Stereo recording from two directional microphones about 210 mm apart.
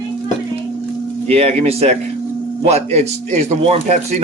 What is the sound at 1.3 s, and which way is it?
A man's voice, 30° right (ahead or behind).